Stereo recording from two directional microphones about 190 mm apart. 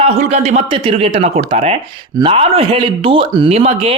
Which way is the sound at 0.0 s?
35° right (ahead or behind).